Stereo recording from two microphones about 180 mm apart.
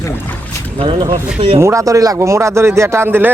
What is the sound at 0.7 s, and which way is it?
A man's voice, 25° right (ahead or behind).